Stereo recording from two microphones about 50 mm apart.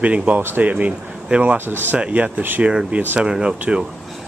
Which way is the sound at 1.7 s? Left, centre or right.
Right.